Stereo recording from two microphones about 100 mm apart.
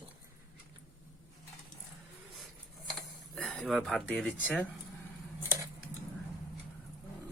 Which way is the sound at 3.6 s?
Centre (ahead or behind).